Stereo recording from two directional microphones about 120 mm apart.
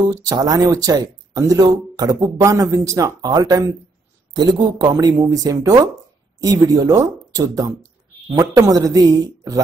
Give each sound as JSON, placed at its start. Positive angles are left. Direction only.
{"t": 0.1, "sound": "speech", "side_deg": -30}